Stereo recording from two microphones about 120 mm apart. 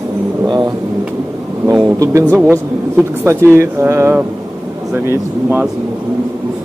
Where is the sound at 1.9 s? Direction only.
25° right (ahead or behind).